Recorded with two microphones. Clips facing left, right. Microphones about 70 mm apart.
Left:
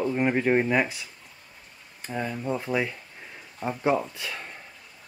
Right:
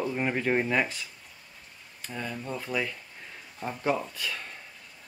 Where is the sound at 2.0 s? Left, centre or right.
Left.